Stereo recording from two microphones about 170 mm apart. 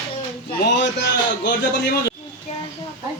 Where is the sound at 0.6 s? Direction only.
90° left.